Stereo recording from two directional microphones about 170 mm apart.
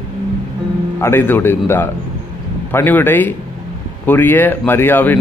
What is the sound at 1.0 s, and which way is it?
Speech, 10° left (ahead or behind).